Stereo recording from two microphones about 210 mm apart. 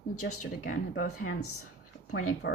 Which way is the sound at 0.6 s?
40° left (ahead or behind).